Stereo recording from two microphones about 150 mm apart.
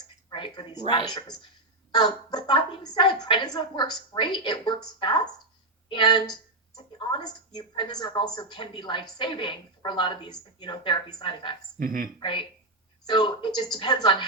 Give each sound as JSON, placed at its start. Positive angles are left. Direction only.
{"t": 0.3, "sound": "a woman's voice", "side_deg": 35}
{"t": 11.8, "sound": "speech", "side_deg": -75}
{"t": 12.2, "sound": "a woman's voice", "side_deg": 35}